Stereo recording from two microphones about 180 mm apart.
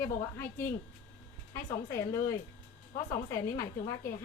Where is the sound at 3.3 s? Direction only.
15° left (ahead or behind).